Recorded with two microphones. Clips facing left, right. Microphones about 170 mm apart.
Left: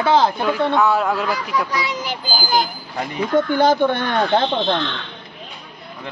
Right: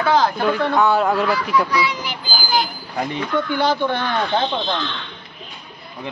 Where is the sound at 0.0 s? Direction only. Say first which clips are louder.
Left 1 dB; 25° left (ahead or behind).